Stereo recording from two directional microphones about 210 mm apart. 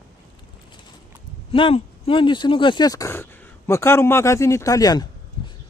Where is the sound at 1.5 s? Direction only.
25° left (ahead or behind).